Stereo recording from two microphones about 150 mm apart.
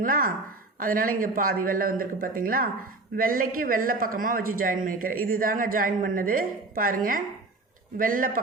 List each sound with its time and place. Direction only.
0.0 s speech: 70° right (ahead or behind)